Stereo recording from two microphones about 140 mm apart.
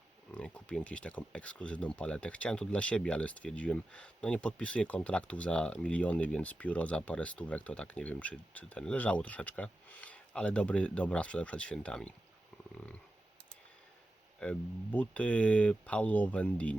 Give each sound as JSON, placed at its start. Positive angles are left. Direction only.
{"t": 0.3, "sound": "speech", "side_deg": 10}
{"t": 14.3, "sound": "speech", "side_deg": 5}